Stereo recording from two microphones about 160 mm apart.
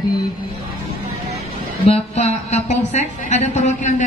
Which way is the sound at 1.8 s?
40° left (ahead or behind).